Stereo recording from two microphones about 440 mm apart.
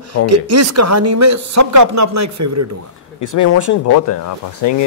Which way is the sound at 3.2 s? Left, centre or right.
Left.